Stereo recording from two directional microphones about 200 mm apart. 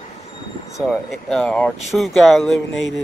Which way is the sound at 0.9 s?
Centre (ahead or behind).